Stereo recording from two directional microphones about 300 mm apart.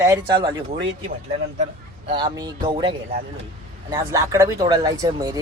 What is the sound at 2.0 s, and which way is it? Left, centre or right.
Speech, centre.